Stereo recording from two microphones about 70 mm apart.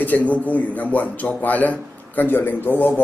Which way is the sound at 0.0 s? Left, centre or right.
Left.